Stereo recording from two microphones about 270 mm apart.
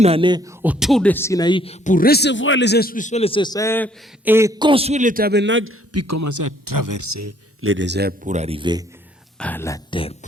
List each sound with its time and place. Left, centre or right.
0.0 s speech: centre
4.3 s a man's voice: centre; by 5.7 s right
5.9 s a man's voice: right
7.6 s a man's voice: right; by 8.8 s centre
9.4 s speech: centre